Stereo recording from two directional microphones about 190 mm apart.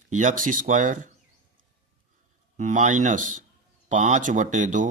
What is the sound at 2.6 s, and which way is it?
Speech, 40° right (ahead or behind).